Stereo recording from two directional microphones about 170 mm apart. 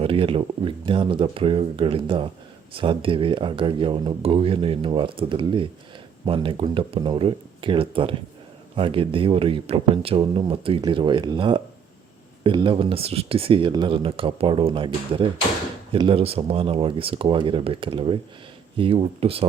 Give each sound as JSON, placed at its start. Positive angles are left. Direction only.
{"t": 0.0, "sound": "speech", "side_deg": -30}